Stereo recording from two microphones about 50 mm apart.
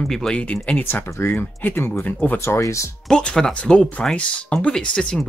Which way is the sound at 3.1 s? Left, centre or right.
Centre.